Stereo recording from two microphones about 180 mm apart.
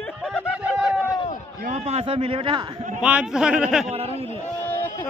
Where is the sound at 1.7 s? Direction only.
35° right (ahead or behind).